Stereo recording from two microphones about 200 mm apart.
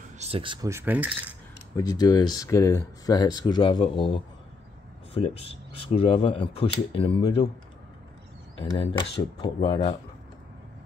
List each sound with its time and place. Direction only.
0.2 s speech: 25° right (ahead or behind); by 1.1 s 10° right (ahead or behind)
1.8 s speech: 20° left (ahead or behind)
5.9 s speech: 25° left (ahead or behind)
8.5 s speech: 25° left (ahead or behind)